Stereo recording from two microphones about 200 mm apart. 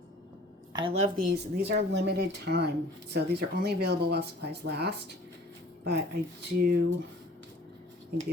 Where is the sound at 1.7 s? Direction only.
60° right (ahead or behind).